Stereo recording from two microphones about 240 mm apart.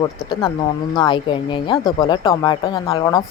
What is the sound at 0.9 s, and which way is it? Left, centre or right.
A woman's voice, centre.